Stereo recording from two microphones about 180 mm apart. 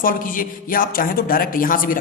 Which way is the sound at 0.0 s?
50° left (ahead or behind).